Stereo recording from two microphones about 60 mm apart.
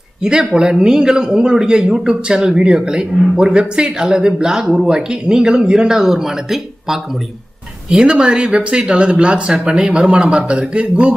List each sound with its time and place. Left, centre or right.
0.2 s a man's voice: centre